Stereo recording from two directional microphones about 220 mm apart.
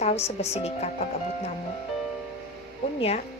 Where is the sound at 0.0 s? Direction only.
30° left (ahead or behind).